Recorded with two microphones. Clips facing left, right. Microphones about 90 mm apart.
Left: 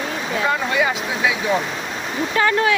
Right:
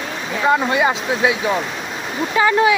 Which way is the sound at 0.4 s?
20° right (ahead or behind).